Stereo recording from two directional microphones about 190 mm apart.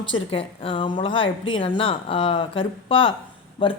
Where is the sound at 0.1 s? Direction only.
30° left (ahead or behind).